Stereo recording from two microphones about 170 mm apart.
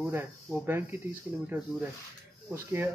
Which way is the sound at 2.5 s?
15° right (ahead or behind).